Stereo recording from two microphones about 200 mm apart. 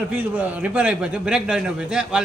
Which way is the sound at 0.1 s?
10° right (ahead or behind).